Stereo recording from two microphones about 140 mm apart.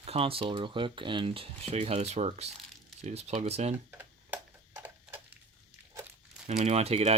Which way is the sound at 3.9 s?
15° right (ahead or behind).